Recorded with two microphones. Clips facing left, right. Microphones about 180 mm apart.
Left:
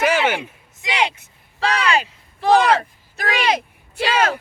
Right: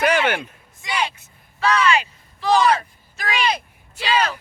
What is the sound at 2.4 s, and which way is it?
Speech, 60° left (ahead or behind).